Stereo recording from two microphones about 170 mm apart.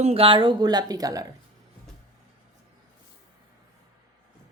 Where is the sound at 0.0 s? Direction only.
35° right (ahead or behind).